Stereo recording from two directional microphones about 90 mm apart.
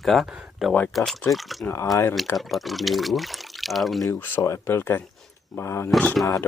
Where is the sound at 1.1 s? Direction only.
Centre (ahead or behind).